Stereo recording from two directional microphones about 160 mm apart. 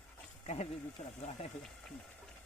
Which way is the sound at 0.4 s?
45° left (ahead or behind).